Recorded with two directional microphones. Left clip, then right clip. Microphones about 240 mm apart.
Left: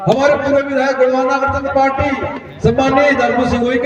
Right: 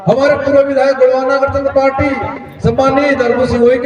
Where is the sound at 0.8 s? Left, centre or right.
Right.